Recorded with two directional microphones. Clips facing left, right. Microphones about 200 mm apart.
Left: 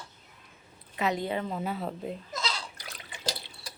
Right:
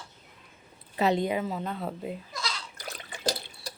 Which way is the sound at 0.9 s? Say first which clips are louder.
Right 4 dB; 35° right (ahead or behind).